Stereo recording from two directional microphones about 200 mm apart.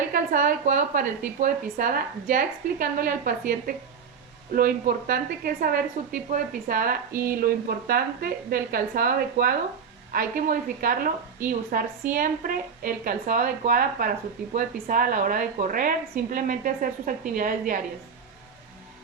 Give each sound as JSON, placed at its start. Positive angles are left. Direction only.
{"t": 0.1, "sound": "a woman's voice", "side_deg": -45}
{"t": 4.5, "sound": "a woman's voice", "side_deg": -45}